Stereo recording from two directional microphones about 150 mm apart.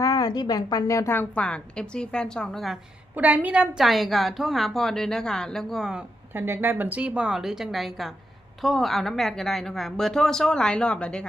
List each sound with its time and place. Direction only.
0.0 s a woman's voice: 25° left (ahead or behind); by 2.7 s centre (ahead or behind)
3.2 s a woman's voice: 10° right (ahead or behind); by 11.3 s 5° left (ahead or behind)